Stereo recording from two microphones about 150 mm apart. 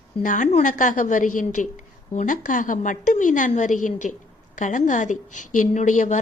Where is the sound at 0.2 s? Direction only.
55° left (ahead or behind).